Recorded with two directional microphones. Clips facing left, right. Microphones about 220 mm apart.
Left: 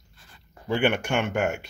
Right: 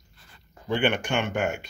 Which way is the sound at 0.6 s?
10° left (ahead or behind).